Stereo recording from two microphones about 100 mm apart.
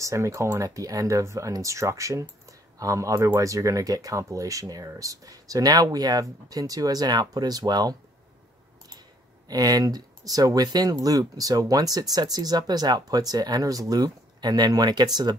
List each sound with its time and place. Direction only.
0.0 s speech: 30° right (ahead or behind)
9.5 s speech: 40° right (ahead or behind)